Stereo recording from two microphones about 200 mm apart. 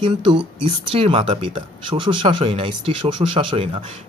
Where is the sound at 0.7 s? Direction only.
30° right (ahead or behind).